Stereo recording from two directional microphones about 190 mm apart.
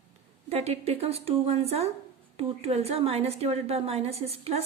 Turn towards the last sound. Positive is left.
turn(degrees=-35)  # may be behind; listen again after turning